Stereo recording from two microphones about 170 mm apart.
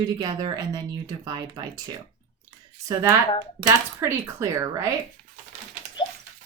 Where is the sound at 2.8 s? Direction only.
20° right (ahead or behind).